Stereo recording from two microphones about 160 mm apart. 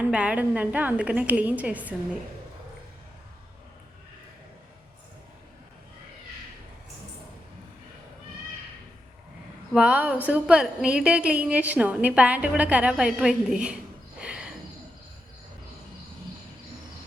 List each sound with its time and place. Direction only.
0.0 s a woman's voice: 5° right (ahead or behind)
9.7 s a woman's voice: 5° right (ahead or behind)
14.2 s a sound: 5° right (ahead or behind)